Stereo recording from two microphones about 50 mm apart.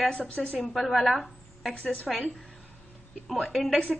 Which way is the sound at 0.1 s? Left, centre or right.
Left.